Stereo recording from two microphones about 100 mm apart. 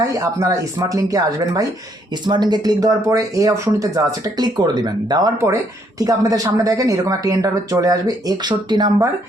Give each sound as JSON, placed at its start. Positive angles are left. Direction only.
{"t": 0.0, "sound": "a woman's voice", "side_deg": -30}
{"t": 2.2, "sound": "a woman's voice", "side_deg": -45}